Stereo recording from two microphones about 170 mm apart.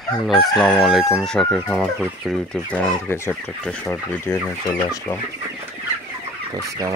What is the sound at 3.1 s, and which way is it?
Speech, 15° left (ahead or behind).